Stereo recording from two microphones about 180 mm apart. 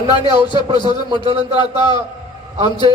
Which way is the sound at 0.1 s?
25° left (ahead or behind).